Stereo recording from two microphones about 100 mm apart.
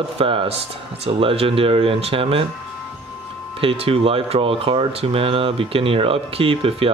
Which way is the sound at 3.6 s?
70° right (ahead or behind).